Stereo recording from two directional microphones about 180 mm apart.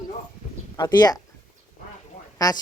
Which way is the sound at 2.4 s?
20° left (ahead or behind).